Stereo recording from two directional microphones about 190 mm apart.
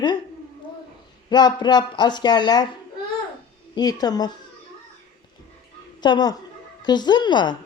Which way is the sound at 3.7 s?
20° left (ahead or behind).